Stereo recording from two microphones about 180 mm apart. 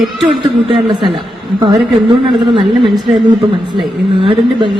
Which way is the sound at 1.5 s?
25° right (ahead or behind).